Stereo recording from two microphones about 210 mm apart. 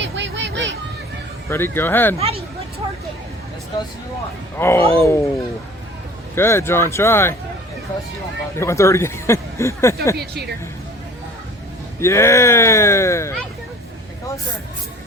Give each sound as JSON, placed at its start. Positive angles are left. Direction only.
{"t": 0.2, "sound": "a sound", "side_deg": -60}
{"t": 1.5, "sound": "speech", "side_deg": 10}
{"t": 2.1, "sound": "a sound", "side_deg": -30}
{"t": 4.5, "sound": "speech", "side_deg": 10}
{"t": 6.3, "sound": "speech", "side_deg": 10}
{"t": 8.5, "sound": "speech", "side_deg": 15}
{"t": 11.9, "sound": "speech", "side_deg": 15}